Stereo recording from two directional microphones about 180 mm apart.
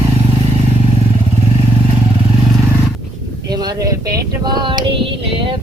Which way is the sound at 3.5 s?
20° right (ahead or behind).